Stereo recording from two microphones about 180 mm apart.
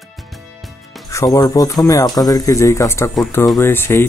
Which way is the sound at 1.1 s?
20° left (ahead or behind).